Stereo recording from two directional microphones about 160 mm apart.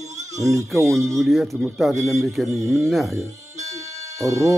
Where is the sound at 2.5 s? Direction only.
20° right (ahead or behind).